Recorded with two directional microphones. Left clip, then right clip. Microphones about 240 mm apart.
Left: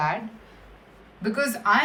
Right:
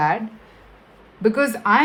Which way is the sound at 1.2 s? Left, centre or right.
Right.